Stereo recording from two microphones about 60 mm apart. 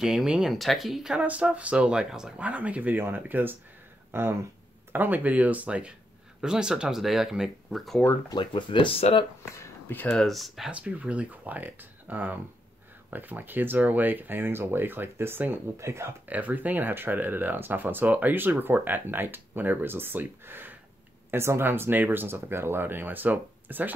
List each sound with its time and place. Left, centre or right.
0.0 s speech: centre
1.2 s speech: right
2.3 s speech: right
4.9 s speech: right; by 8.0 s centre
10.0 s speech: centre
10.7 s speech: right
15.8 s speech: right
16.3 s speech: right